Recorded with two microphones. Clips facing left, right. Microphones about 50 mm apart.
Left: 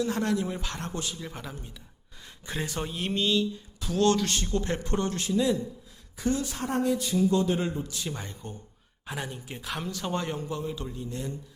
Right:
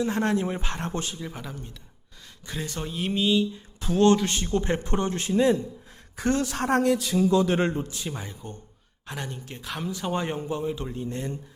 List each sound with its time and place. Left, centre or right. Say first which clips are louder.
0.0 s speech: right 3 dB; right
1.2 s speech: right 2 dB; centre
2.2 s a sound: left 1 dB; left
2.6 s speech: right 4 dB; centre
3.8 s speech: right 5 dB; right
4.0 s speech: right 4 dB; right
6.1 s speech: right 3 dB; right
6.4 s speech: right 5 dB; right
7.6 s a man's voice: right 5 dB; right
8.0 s speech: right 1 dB; centre
10.0 s speech: right 4 dB; centre; by 11.3 s right